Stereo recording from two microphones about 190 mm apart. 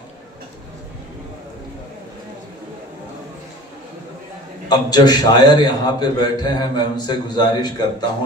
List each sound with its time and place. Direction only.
4.6 s a man's voice: 20° left (ahead or behind)